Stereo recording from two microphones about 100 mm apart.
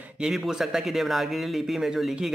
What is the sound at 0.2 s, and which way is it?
Speech, 5° right (ahead or behind).